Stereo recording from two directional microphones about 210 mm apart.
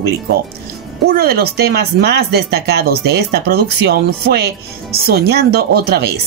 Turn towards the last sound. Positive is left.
turn(degrees=-50)  # may be behind; listen again after turning